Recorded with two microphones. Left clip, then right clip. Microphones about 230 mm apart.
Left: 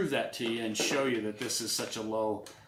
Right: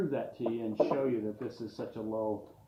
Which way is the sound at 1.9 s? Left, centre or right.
Left.